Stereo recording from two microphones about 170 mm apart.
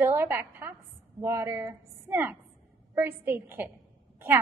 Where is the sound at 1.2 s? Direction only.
15° right (ahead or behind).